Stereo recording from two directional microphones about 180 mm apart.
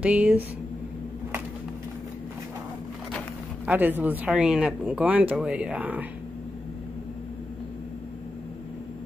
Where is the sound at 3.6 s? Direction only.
10° right (ahead or behind).